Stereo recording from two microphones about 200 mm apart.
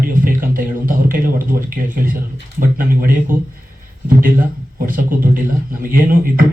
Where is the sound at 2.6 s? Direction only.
45° right (ahead or behind).